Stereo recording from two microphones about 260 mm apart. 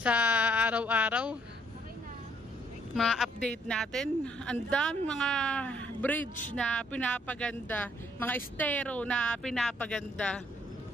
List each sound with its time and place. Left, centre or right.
0.0 s speech: centre
2.9 s speech: centre